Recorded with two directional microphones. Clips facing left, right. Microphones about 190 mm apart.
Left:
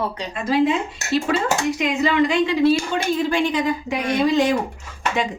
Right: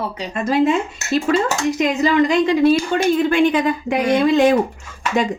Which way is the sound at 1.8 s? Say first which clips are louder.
Right 5 dB; 40° right (ahead or behind).